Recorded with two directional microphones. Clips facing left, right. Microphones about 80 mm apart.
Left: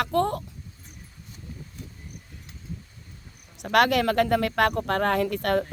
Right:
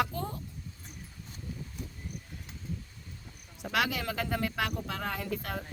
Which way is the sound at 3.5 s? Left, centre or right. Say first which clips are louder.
Left 10 dB; left.